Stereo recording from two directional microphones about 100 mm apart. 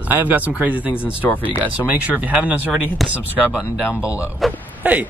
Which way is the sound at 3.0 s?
Centre (ahead or behind).